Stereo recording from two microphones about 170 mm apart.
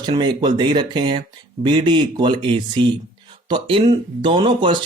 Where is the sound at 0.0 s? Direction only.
25° right (ahead or behind).